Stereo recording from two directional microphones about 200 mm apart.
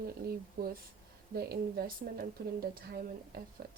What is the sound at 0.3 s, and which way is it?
A woman's voice, 45° right (ahead or behind).